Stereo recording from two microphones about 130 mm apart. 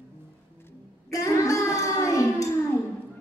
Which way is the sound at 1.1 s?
25° left (ahead or behind).